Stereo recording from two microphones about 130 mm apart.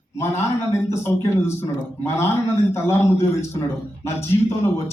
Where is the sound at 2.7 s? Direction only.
20° left (ahead or behind).